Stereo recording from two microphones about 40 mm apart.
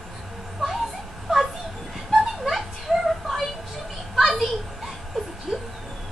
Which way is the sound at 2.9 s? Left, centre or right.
Centre.